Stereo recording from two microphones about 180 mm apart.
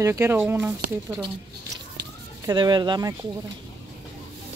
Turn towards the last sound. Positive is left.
turn(degrees=-25)  # may be behind; listen again after turning